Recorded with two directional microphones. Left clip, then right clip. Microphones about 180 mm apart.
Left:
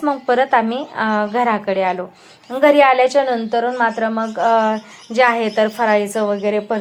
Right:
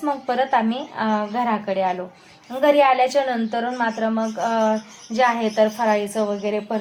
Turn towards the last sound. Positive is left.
turn(degrees=25)  # may be behind; listen again after turning